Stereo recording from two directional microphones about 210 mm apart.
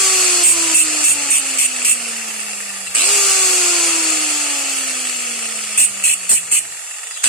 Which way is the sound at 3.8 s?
Centre (ahead or behind).